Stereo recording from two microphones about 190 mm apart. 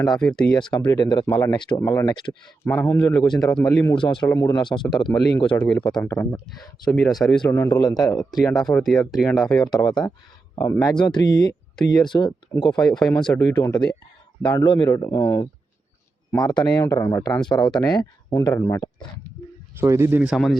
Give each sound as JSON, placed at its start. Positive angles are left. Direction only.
{"t": 0.1, "sound": "speech", "side_deg": 5}
{"t": 0.6, "sound": "speech", "side_deg": 25}
{"t": 3.6, "sound": "speech", "side_deg": 15}
{"t": 3.9, "sound": "speech", "side_deg": 25}
{"t": 4.3, "sound": "speech", "side_deg": 15}
{"t": 4.9, "sound": "speech", "side_deg": 0}
{"t": 5.1, "sound": "speech", "side_deg": 25}
{"t": 5.5, "sound": "speech", "side_deg": 5}
{"t": 7.4, "sound": "speech", "side_deg": 15}
{"t": 8.5, "sound": "speech", "side_deg": 0}
{"t": 9.7, "sound": "speech", "side_deg": 20}
{"t": 17.4, "sound": "speech", "side_deg": 5}
{"t": 17.9, "sound": "speech", "side_deg": 20}
{"t": 19.8, "sound": "a man's voice", "side_deg": -15}